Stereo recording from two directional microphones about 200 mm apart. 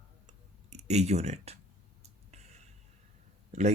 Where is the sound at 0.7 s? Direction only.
35° right (ahead or behind).